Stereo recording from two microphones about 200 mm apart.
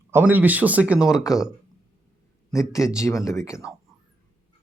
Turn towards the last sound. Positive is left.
turn(degrees=15)  # may be behind; listen again after turning